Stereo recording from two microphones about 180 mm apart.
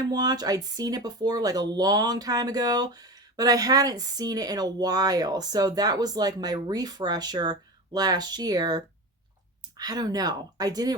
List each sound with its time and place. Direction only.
0.0 s speech: 20° right (ahead or behind)